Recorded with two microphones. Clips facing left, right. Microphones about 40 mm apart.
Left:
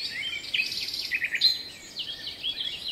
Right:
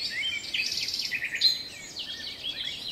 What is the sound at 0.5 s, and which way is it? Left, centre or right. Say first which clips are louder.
Bird vocalization: left 2 dB; left.